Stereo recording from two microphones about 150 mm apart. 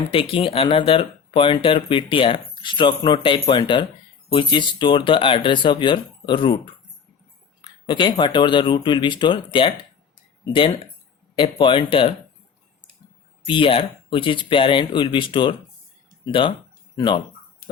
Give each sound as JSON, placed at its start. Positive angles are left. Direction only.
{"t": 0.1, "sound": "speech", "side_deg": 35}
{"t": 7.6, "sound": "speech", "side_deg": 30}
{"t": 13.4, "sound": "speech", "side_deg": 35}